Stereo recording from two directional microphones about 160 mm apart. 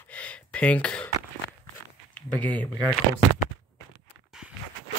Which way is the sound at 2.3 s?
10° left (ahead or behind).